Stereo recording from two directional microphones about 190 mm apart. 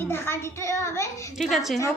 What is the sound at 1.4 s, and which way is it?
Speech, centre (ahead or behind).